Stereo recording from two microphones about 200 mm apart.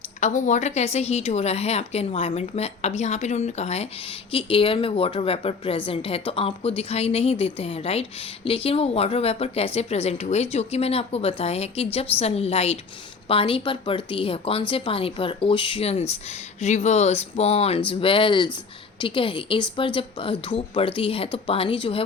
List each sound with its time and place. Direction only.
0.2 s a woman's voice: 35° left (ahead or behind)